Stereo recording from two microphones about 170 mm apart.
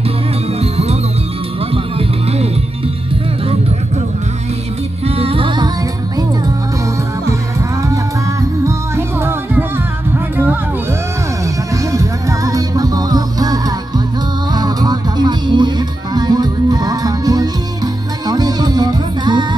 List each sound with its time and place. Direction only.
0.6 s music: 35° right (ahead or behind)
5.0 s music: 35° right (ahead or behind)
8.6 s music: 15° right (ahead or behind)